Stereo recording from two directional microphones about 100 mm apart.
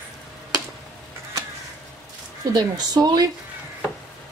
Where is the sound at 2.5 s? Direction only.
40° right (ahead or behind).